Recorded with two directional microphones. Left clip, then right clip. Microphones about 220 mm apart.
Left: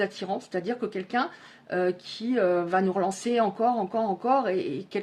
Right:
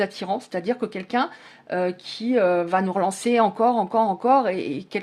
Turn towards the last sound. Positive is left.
turn(degrees=-30)  # may be behind; listen again after turning